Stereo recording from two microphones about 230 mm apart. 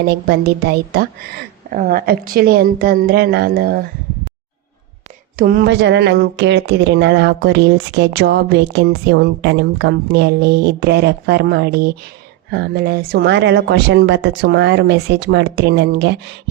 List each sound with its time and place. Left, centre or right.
0.1 s a woman's voice: right
5.4 s a woman's voice: right